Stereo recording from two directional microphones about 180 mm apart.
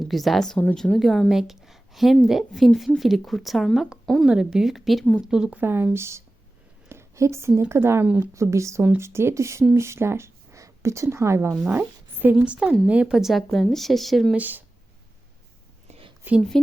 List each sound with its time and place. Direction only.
0.1 s a woman's voice: centre (ahead or behind)
15.9 s a sound: 30° right (ahead or behind)
16.2 s a woman's voice: centre (ahead or behind)